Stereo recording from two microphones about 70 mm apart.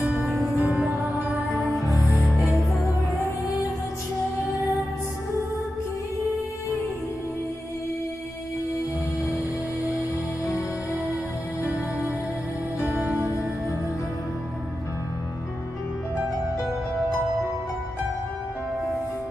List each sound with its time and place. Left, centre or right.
0.2 s music: centre
1.7 s music: left
2.0 s music: centre
3.2 s music: left
4.5 s music: centre
9.8 s music: left
13.2 s music: right